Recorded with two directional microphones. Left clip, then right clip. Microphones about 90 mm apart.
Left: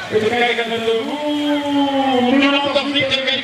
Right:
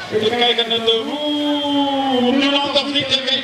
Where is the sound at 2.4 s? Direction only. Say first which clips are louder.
Left 1 dB; 10° right (ahead or behind).